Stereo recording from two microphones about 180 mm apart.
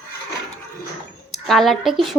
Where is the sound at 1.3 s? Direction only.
Centre (ahead or behind).